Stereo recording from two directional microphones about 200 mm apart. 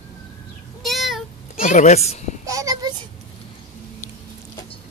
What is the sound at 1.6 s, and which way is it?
Speech, 35° left (ahead or behind).